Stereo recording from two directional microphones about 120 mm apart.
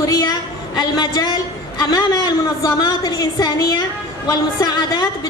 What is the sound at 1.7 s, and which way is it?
A woman's voice, 35° left (ahead or behind).